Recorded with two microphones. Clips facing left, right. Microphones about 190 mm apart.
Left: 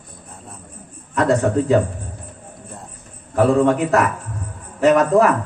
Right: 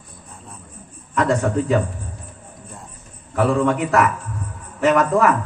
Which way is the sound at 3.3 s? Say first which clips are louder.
Left 3 dB; 35° left (ahead or behind).